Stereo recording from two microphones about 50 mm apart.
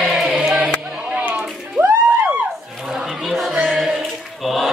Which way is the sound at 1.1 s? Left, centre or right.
Right.